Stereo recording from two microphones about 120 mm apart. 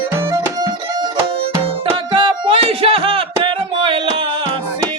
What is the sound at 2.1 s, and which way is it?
Music, 45° right (ahead or behind).